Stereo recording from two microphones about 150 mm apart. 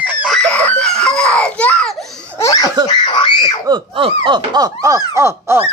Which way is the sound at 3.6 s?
30° right (ahead or behind).